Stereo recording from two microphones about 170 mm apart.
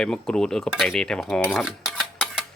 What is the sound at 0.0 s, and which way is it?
Speech, 5° left (ahead or behind).